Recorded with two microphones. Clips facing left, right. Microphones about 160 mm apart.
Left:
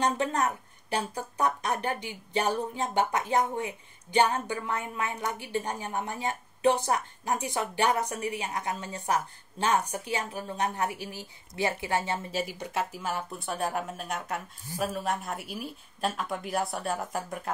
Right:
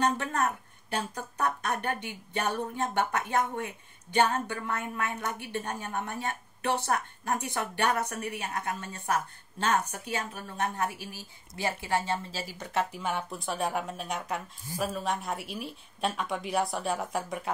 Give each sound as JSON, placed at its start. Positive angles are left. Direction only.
{"t": 0.8, "sound": "speech", "side_deg": 15}
{"t": 12.9, "sound": "speech", "side_deg": 0}